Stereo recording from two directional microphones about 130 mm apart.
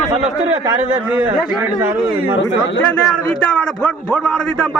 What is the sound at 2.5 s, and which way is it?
A man's voice, 10° left (ahead or behind).